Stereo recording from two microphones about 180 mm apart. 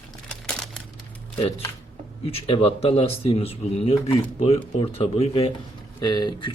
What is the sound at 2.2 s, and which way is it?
Speech, 30° left (ahead or behind).